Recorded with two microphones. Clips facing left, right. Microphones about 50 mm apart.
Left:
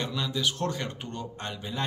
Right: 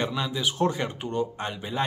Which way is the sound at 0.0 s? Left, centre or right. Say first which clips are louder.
Right 2 dB; centre.